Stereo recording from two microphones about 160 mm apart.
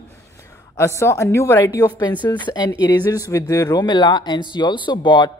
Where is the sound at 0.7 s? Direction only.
15° left (ahead or behind).